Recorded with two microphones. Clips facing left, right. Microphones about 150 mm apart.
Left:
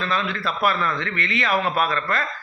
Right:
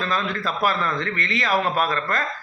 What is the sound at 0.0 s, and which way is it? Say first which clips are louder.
Speech: even; 40° right (ahead or behind).